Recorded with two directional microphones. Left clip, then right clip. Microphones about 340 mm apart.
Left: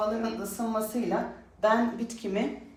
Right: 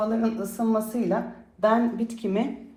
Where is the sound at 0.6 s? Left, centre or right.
Centre.